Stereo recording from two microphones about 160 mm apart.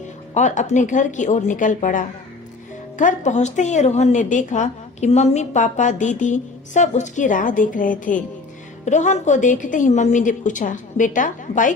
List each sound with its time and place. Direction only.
0.3 s a woman's voice: 50° left (ahead or behind)